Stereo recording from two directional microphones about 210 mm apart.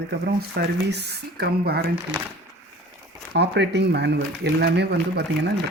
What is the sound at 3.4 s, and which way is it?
Speech, 55° right (ahead or behind).